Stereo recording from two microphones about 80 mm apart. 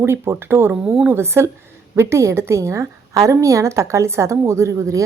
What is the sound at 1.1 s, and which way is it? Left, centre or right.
Speech, right.